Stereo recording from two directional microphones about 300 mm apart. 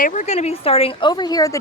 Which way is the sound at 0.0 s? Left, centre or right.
Left.